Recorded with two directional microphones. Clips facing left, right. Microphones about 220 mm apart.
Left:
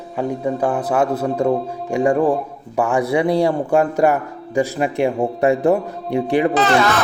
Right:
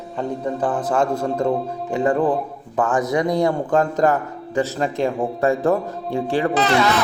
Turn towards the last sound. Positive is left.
turn(degrees=50)  # may be behind; listen again after turning